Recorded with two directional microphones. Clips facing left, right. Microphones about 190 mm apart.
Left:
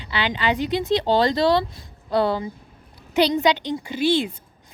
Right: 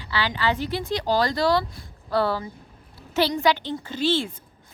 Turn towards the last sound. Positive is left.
turn(degrees=15)  # may be behind; listen again after turning